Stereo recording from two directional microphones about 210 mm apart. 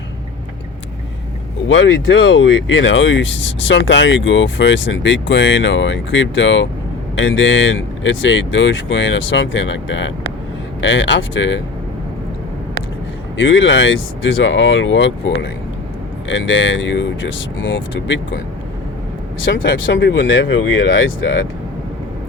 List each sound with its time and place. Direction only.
1.6 s speech: 65° left (ahead or behind)
13.3 s speech: 60° left (ahead or behind)
16.3 s speech: 60° left (ahead or behind)
19.4 s speech: 65° left (ahead or behind)